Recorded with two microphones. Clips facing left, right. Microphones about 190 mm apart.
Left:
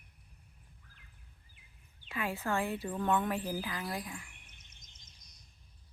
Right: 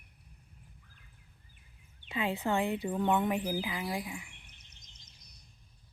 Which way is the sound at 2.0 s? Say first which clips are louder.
Right 3 dB; 20° right (ahead or behind).